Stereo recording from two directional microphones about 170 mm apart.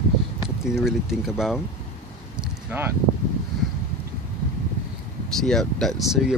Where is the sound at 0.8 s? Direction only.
Centre (ahead or behind).